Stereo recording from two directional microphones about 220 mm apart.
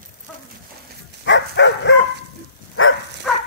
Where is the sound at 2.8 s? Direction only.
65° left (ahead or behind).